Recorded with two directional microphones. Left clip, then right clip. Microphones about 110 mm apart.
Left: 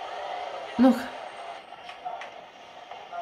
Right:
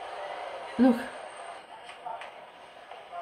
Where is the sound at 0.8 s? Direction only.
35° left (ahead or behind).